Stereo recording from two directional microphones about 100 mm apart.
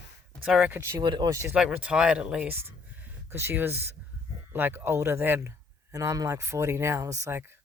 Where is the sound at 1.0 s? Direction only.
45° right (ahead or behind).